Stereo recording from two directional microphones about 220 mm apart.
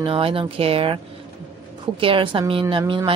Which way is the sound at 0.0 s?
25° right (ahead or behind).